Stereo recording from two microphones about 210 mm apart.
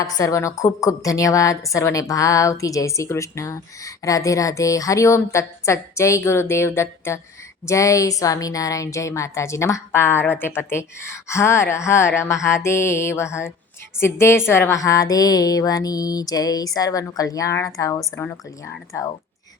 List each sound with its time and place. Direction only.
0.0 s a woman's voice: 15° left (ahead or behind)